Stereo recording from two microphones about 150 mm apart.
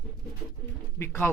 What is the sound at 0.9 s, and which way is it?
Speech, 15° left (ahead or behind).